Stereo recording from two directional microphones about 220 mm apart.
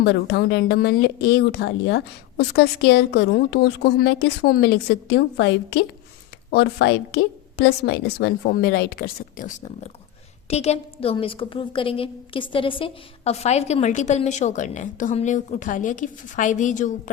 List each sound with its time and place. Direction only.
0.0 s a woman's voice: 50° left (ahead or behind)